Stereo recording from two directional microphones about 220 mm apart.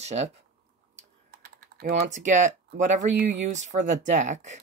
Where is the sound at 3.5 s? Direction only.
35° right (ahead or behind).